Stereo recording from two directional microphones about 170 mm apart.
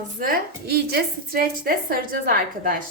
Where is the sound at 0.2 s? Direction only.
65° right (ahead or behind).